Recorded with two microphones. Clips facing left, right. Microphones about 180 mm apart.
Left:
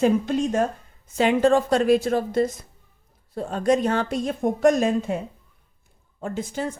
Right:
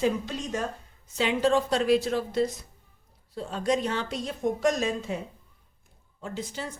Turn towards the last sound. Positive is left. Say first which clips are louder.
# left 7 dB
turn(degrees=50)  # may be behind; listen again after turning